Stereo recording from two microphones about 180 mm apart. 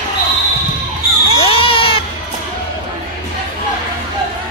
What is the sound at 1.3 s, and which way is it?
Baby cry, 30° left (ahead or behind).